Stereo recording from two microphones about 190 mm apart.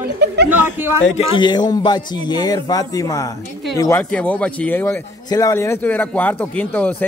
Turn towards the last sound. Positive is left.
turn(degrees=10)  # may be behind; listen again after turning